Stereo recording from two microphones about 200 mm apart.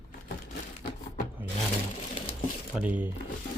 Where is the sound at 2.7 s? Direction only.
10° right (ahead or behind).